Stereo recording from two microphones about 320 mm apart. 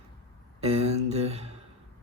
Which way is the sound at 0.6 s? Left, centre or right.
Centre.